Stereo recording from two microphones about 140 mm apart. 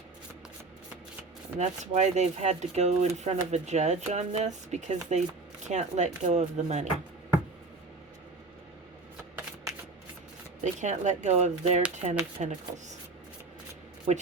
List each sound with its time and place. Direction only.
1.5 s speech: 55° right (ahead or behind)
10.6 s speech: 60° right (ahead or behind)
14.1 s speech: 50° right (ahead or behind)